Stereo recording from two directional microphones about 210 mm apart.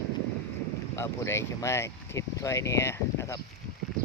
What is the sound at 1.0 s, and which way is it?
Speech, 10° left (ahead or behind).